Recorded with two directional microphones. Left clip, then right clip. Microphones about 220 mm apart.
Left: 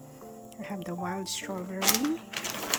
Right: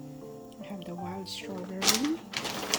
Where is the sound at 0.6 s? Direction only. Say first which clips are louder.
Left 5 dB; 15° left (ahead or behind).